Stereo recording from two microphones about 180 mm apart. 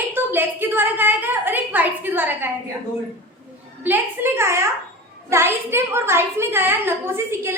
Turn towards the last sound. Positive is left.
turn(degrees=-15)  # may be behind; listen again after turning